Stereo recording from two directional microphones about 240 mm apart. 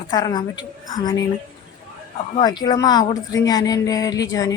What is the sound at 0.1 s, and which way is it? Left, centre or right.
Speech, centre.